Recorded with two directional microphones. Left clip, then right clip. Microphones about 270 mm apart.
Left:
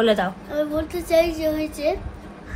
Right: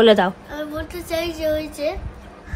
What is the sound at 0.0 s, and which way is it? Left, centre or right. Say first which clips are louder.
Speech: right 6 dB; right.